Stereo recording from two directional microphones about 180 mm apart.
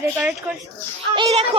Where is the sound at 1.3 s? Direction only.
35° right (ahead or behind).